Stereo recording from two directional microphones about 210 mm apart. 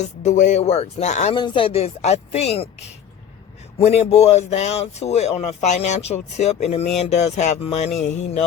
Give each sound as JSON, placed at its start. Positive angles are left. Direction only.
{"t": 0.0, "sound": "speech", "side_deg": 35}